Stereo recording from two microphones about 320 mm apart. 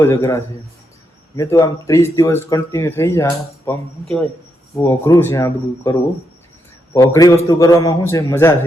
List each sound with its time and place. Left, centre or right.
0.0 s speech: centre